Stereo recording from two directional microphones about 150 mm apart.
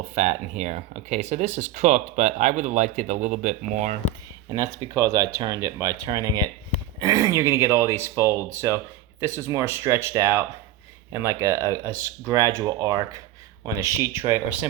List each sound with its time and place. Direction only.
0.1 s speech: 50° right (ahead or behind)
4.4 s speech: 25° right (ahead or behind)